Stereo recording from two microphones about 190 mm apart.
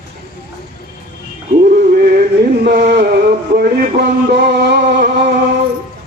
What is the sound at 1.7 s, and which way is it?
Synthetic singing, 50° right (ahead or behind).